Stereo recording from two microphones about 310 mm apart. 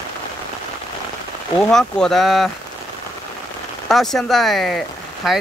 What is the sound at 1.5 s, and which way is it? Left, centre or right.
Speech, centre.